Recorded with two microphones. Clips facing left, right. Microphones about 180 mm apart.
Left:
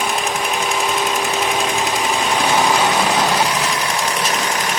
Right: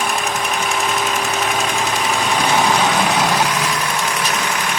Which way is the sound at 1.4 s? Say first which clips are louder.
Left 1 dB; 15° left (ahead or behind).